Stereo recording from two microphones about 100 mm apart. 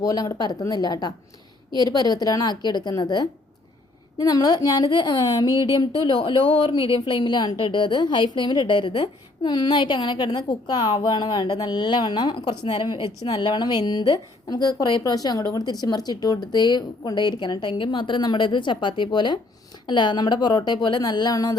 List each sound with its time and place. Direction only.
0.0 s a woman's voice: 35° left (ahead or behind)